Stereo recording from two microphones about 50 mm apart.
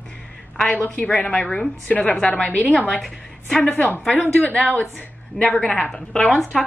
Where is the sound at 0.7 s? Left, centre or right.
Left.